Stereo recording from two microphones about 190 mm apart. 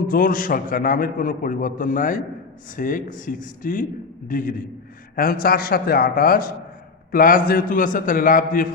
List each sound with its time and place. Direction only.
0.1 s a man's voice: 45° left (ahead or behind)